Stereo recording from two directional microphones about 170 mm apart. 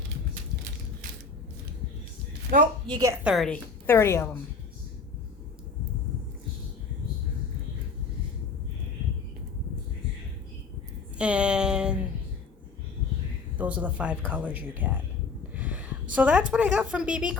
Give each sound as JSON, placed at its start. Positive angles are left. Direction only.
{"t": 2.8, "sound": "a woman's voice", "side_deg": -25}
{"t": 3.2, "sound": "a woman's voice", "side_deg": 0}
{"t": 3.8, "sound": "a woman's voice", "side_deg": 15}
{"t": 11.2, "sound": "a sound", "side_deg": -5}
{"t": 13.6, "sound": "a woman's voice", "side_deg": -10}
{"t": 15.5, "sound": "a sound", "side_deg": -10}
{"t": 16.1, "sound": "a woman's voice", "side_deg": -5}